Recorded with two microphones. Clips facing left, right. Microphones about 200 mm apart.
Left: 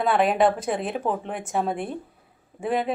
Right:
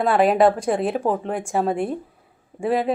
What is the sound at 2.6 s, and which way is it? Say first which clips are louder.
Speech: right 4 dB; centre (ahead or behind).